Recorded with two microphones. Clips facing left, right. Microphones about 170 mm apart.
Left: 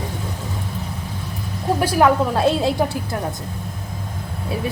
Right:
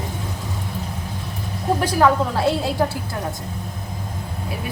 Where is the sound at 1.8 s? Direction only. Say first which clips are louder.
Left 2 dB; 15° left (ahead or behind).